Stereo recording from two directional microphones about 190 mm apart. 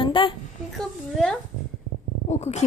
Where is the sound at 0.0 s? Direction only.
25° left (ahead or behind).